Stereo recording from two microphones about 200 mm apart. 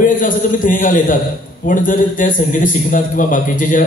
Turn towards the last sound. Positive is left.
turn(degrees=40)  # may be behind; listen again after turning